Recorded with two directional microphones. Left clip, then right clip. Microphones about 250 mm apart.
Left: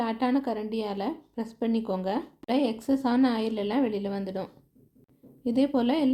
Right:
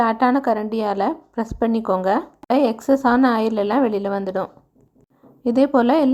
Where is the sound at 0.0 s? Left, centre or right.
Centre.